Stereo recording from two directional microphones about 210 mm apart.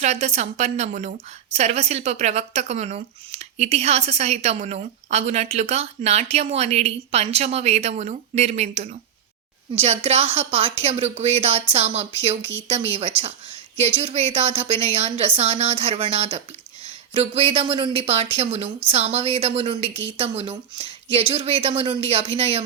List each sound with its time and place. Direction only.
0.0 s speech: 35° right (ahead or behind)